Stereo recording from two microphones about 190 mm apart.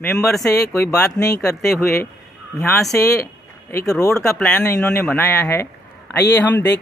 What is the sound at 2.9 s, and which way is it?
Speech, 15° left (ahead or behind).